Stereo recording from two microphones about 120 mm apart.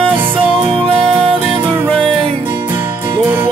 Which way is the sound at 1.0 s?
50° right (ahead or behind).